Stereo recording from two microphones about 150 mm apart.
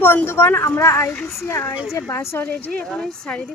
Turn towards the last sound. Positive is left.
turn(degrees=5)  # may be behind; listen again after turning